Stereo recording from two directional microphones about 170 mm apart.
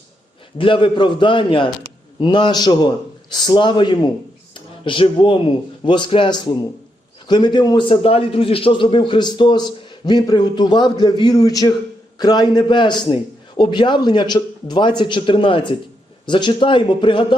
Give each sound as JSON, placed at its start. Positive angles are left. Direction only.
{"t": 0.6, "sound": "a man's voice", "side_deg": 30}
{"t": 4.5, "sound": "a sound", "side_deg": 30}
{"t": 5.8, "sound": "a man's voice", "side_deg": 30}